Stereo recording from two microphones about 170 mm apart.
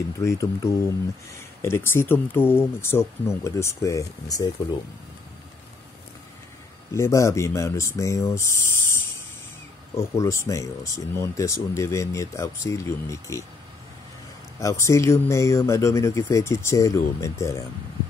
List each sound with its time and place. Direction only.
0.2 s speech: 20° left (ahead or behind)
6.9 s speech: 15° left (ahead or behind)
14.6 s speech: 15° left (ahead or behind)